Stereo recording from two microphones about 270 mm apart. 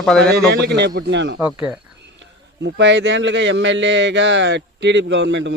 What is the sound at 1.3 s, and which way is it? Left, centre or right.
Speech, centre.